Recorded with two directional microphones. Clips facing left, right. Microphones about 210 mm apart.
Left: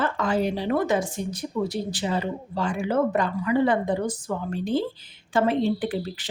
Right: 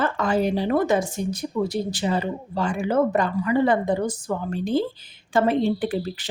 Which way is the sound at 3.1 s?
45° right (ahead or behind).